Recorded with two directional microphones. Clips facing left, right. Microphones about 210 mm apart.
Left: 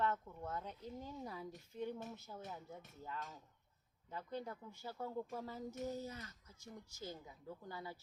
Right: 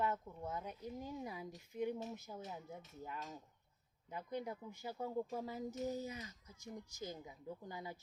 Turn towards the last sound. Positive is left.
turn(degrees=-15)  # may be behind; listen again after turning